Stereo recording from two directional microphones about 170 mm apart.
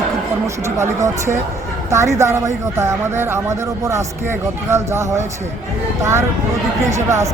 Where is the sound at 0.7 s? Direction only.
15° right (ahead or behind).